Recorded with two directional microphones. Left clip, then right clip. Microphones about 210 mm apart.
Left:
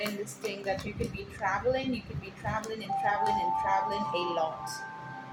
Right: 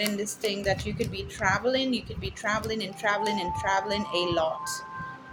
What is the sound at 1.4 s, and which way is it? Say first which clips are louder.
A woman's voice: right 4 dB; 50° right (ahead or behind).